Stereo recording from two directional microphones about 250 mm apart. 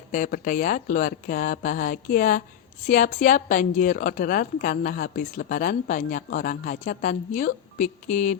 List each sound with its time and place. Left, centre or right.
0.1 s a woman's voice: left